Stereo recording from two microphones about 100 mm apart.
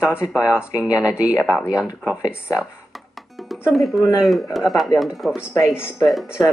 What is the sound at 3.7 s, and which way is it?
Speech, centre (ahead or behind).